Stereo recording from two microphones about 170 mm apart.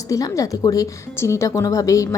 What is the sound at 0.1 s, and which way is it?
A woman's voice, 20° left (ahead or behind).